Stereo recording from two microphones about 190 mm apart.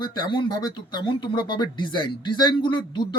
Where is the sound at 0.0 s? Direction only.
25° left (ahead or behind).